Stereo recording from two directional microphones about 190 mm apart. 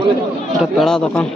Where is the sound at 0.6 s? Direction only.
Centre (ahead or behind).